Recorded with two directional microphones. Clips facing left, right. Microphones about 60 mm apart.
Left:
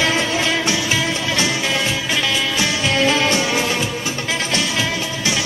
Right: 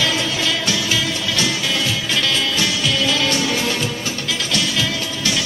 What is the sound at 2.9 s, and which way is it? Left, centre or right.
Music, left.